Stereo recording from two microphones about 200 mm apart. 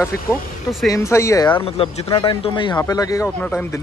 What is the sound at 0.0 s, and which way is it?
Speech, 10° left (ahead or behind).